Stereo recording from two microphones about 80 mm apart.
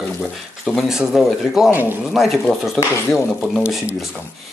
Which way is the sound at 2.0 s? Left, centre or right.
Centre.